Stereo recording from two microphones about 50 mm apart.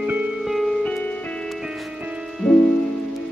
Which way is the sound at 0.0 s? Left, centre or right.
Right.